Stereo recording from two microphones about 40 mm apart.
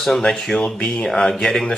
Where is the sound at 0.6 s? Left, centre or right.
Left.